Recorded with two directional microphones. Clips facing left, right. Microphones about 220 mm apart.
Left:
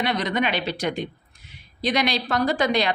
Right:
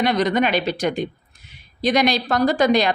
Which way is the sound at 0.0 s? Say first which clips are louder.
Right 5 dB; 45° right (ahead or behind).